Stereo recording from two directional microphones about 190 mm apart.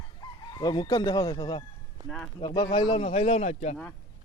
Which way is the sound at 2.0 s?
5° left (ahead or behind).